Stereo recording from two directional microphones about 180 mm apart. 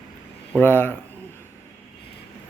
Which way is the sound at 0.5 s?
10° left (ahead or behind).